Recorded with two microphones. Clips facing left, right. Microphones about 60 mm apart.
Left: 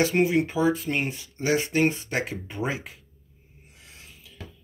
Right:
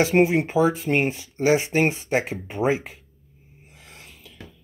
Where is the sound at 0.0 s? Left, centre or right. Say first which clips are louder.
Right 3 dB; right.